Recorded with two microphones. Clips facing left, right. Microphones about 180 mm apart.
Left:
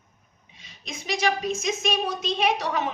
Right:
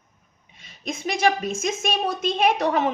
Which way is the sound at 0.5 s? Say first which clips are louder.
Right 8 dB; 50° right (ahead or behind).